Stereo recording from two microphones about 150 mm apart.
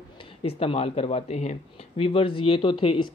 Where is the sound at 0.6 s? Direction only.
40° left (ahead or behind).